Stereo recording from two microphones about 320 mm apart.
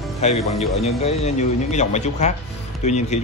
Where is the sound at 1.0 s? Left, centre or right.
Centre.